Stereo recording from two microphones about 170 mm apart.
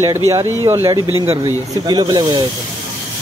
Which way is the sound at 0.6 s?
15° right (ahead or behind).